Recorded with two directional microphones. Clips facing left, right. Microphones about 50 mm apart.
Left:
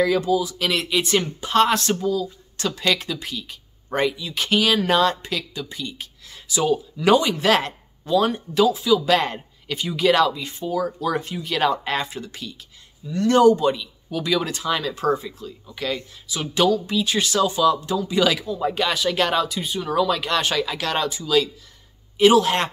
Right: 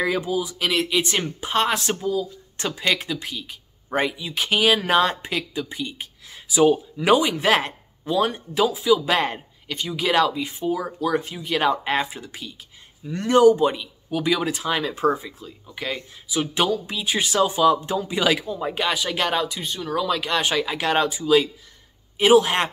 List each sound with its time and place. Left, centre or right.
0.0 s speech: right
8.2 s speech: centre
8.8 s speech: centre
9.7 s speech: centre
10.0 s speech: centre
11.1 s speech: centre
13.0 s speech: right
13.3 s speech: centre
13.6 s speech: centre
19.7 s speech: centre
20.6 s speech: centre